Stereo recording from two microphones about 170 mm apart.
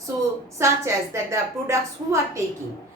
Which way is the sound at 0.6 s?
15° right (ahead or behind).